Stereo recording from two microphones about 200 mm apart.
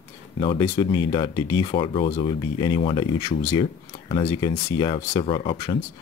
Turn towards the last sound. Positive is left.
turn(degrees=25)  # may be behind; listen again after turning